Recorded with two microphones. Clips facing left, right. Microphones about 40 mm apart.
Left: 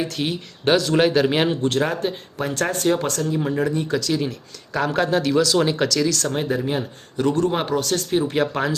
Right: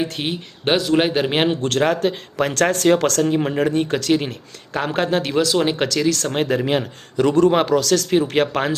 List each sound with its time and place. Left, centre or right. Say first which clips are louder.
0.0 s speech: right 1 dB; right
1.6 s speech: right 3 dB; right
6.3 s speech: right 4 dB; right
7.3 s a man's voice: right 5 dB; right
8.3 s speech: right 2 dB; right